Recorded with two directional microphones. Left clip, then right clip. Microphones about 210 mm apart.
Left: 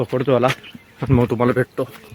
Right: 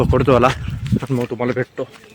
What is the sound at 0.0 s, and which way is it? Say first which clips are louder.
Speech: right 3 dB; 30° right (ahead or behind).